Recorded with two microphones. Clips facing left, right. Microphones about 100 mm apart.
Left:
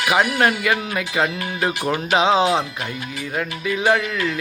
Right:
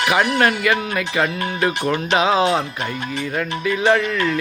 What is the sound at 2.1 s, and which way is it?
Speech, 25° left (ahead or behind).